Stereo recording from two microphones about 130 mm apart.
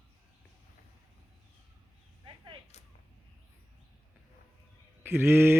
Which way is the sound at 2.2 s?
40° right (ahead or behind).